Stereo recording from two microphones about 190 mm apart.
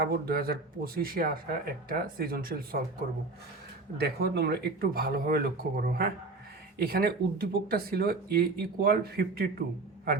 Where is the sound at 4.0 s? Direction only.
55° right (ahead or behind).